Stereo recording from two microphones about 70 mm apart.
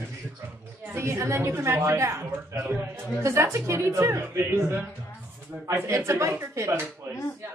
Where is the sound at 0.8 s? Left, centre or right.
Right.